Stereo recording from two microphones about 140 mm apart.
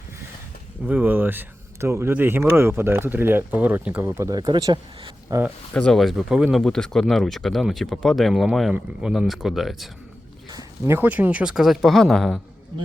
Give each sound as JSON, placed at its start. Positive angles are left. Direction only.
{"t": 0.9, "sound": "speech", "side_deg": -10}
{"t": 4.2, "sound": "speech", "side_deg": -25}
{"t": 5.7, "sound": "speech", "side_deg": 5}
{"t": 10.5, "sound": "speech", "side_deg": -25}